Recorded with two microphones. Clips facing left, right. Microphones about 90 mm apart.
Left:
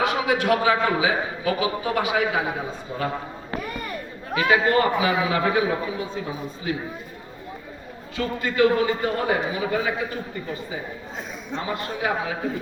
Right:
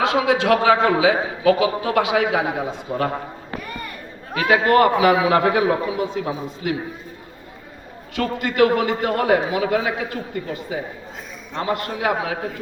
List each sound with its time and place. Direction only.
0.0 s a man's voice: 90° right
4.4 s a man's voice: 60° right (ahead or behind)
8.1 s a man's voice: 70° right (ahead or behind)